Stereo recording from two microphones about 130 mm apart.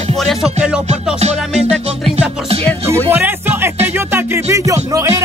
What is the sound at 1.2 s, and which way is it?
Music, 50° right (ahead or behind).